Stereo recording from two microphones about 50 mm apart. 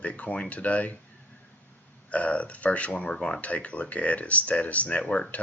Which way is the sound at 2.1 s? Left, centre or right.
Left.